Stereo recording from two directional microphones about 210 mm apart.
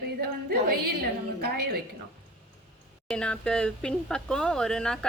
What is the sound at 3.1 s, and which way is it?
Speech, 5° left (ahead or behind).